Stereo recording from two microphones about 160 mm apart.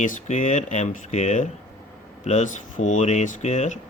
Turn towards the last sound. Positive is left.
turn(degrees=45)  # may be behind; listen again after turning